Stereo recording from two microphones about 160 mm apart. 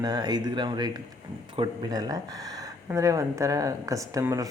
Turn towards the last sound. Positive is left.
turn(degrees=-20)  # may be behind; listen again after turning